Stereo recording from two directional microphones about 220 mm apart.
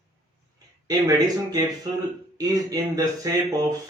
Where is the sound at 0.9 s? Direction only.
15° right (ahead or behind).